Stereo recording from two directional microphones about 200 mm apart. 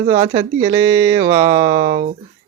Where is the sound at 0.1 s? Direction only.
30° right (ahead or behind).